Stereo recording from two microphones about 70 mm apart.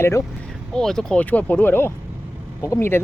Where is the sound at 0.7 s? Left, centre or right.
Centre.